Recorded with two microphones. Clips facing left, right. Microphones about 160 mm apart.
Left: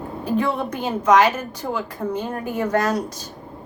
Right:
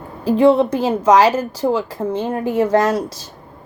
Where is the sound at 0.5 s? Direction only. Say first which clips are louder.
Right 8 dB; 30° right (ahead or behind).